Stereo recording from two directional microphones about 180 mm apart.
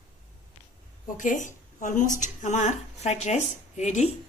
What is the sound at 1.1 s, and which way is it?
A woman's voice, 45° left (ahead or behind).